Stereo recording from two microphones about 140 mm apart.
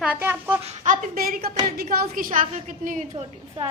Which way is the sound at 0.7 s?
65° right (ahead or behind).